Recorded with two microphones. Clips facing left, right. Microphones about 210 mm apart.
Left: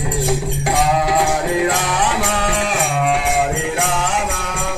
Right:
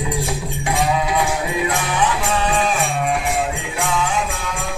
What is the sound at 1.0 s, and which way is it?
Music, 65° left (ahead or behind).